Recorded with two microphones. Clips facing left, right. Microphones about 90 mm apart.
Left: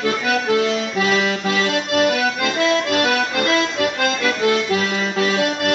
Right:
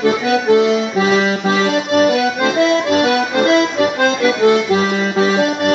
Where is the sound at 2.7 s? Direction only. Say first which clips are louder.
Right 4 dB; 5° right (ahead or behind).